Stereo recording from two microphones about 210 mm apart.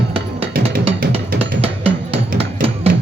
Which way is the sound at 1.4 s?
25° right (ahead or behind).